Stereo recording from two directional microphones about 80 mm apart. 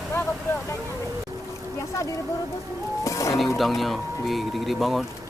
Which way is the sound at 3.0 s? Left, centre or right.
Left.